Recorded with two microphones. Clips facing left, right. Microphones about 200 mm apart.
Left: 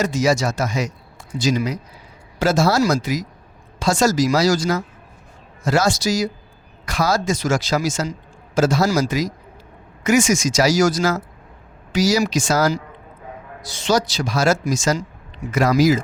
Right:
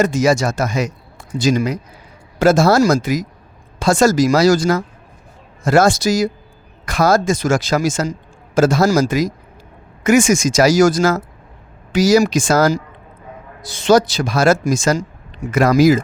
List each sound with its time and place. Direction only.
0.0 s speech: 50° right (ahead or behind)